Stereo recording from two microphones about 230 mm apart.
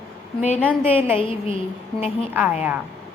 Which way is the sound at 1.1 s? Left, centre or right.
Left.